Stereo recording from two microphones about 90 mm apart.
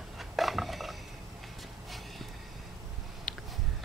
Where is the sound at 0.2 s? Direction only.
Centre (ahead or behind).